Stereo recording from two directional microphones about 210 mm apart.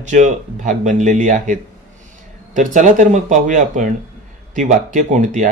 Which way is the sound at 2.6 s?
35° right (ahead or behind).